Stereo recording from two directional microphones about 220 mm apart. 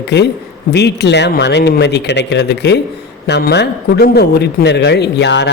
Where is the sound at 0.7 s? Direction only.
50° left (ahead or behind).